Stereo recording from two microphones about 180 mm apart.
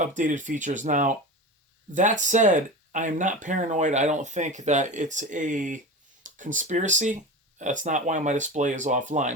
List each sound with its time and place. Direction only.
0.0 s speech: 45° right (ahead or behind)